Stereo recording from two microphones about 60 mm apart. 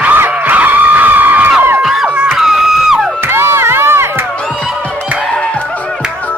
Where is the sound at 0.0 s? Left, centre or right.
Right.